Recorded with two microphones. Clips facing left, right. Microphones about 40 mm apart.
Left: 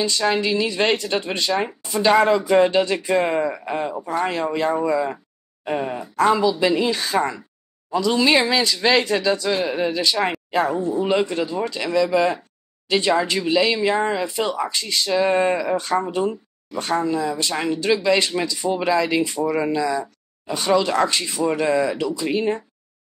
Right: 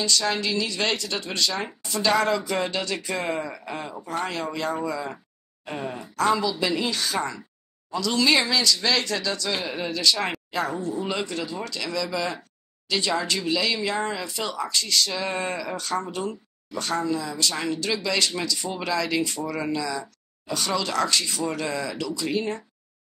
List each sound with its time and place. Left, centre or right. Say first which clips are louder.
0.0 s speech: left 4 dB; left
4.1 s speech: left 5 dB; left